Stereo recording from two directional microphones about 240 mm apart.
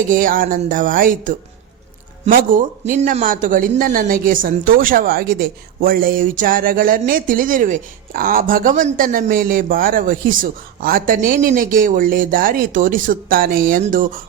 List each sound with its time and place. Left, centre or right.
0.1 s speech: right